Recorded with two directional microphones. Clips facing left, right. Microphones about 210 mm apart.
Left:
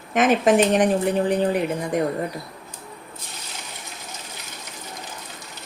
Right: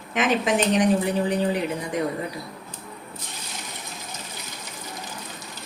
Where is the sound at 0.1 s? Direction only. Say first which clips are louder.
Left 5 dB; 50° left (ahead or behind).